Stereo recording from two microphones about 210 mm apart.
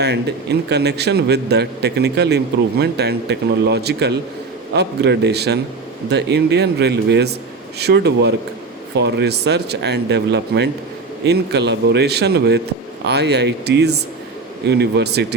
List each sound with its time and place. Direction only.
0.0 s a man's voice: 50° right (ahead or behind)